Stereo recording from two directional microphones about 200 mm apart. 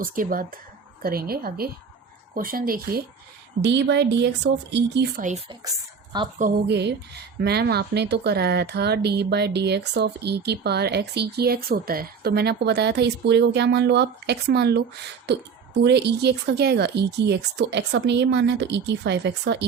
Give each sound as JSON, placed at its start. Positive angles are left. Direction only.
{"t": 0.0, "sound": "a woman's voice", "side_deg": -45}
{"t": 3.6, "sound": "speech", "side_deg": -60}
{"t": 6.7, "sound": "speech", "side_deg": -55}